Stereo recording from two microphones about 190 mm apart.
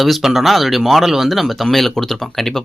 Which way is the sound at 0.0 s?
Centre (ahead or behind).